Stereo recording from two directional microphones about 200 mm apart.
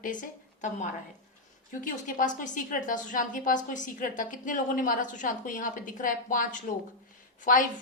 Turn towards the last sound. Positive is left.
turn(degrees=40)  # may be behind; listen again after turning